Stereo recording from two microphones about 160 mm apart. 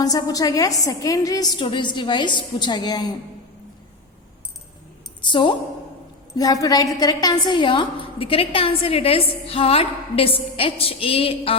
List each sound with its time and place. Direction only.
0.0 s a woman's voice: 25° left (ahead or behind)
5.2 s a woman's voice: 30° left (ahead or behind)